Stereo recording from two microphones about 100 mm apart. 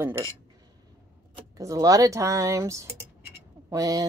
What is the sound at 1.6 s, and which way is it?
Speech, 35° right (ahead or behind).